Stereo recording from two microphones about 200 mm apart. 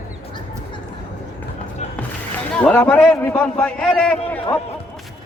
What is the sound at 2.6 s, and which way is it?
A man's voice, 10° left (ahead or behind).